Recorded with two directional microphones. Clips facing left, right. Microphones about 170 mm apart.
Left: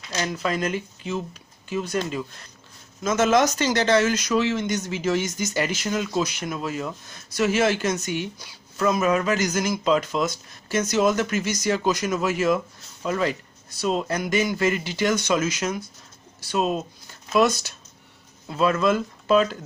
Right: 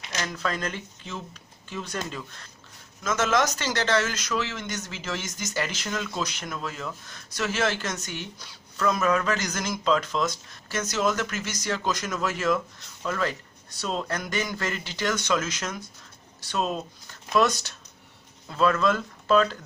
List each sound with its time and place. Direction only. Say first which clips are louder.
0.2 s speech: left 5 dB; 15° left (ahead or behind)
3.0 s speech: left 5 dB; 20° left (ahead or behind)
6.2 s speech: left 5 dB; 10° left (ahead or behind)